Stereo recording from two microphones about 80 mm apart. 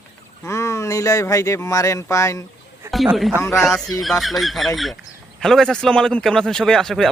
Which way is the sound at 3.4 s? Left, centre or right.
Left.